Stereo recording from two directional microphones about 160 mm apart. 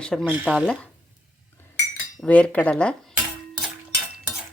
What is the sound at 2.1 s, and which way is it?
Cutlery, 5° left (ahead or behind).